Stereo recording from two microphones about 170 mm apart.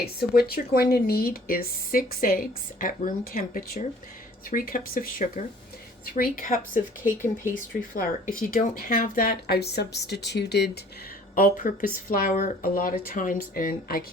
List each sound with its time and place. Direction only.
0.0 s speech: 65° left (ahead or behind)
11.3 s speech: 50° left (ahead or behind)